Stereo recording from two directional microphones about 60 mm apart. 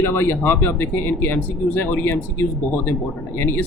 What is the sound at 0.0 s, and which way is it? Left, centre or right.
Speech, left.